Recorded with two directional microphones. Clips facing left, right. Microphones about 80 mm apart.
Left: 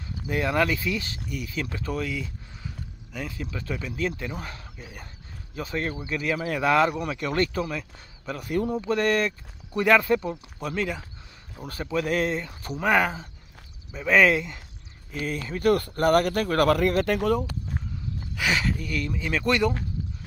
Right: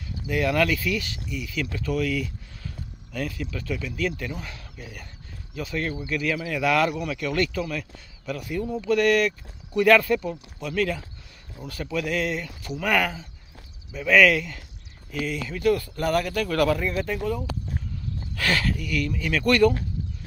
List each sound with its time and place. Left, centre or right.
0.3 s speech: left
1.2 s speech: left; by 3.3 s centre
3.3 s speech: left
8.5 s speech: left
8.8 s speech: left
15.2 s speech: left
15.7 s speech: left
16.4 s speech: left
16.7 s speech: left
18.3 s a sound: centre
18.8 s speech: left